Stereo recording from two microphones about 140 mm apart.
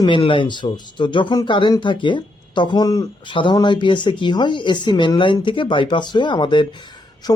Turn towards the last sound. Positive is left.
turn(degrees=30)  # may be behind; listen again after turning